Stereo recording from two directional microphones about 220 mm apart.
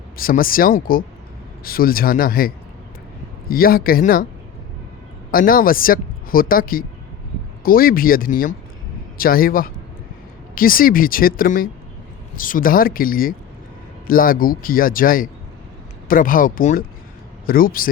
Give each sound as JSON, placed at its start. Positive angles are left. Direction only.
{"t": 0.2, "sound": "speech", "side_deg": 40}
{"t": 3.5, "sound": "speech", "side_deg": 40}
{"t": 5.3, "sound": "a woman's voice", "side_deg": 40}